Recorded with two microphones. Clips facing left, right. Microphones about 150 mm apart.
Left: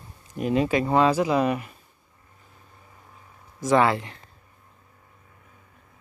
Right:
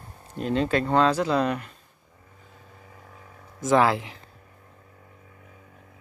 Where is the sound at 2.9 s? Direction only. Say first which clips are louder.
Right 4 dB; 85° right.